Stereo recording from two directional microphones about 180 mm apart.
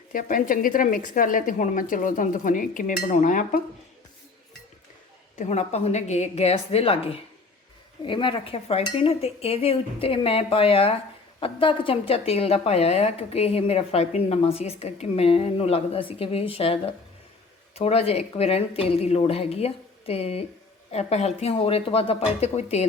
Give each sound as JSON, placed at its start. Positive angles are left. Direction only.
{"t": 0.1, "sound": "a woman's voice", "side_deg": 50}
{"t": 5.4, "sound": "a woman's voice", "side_deg": 40}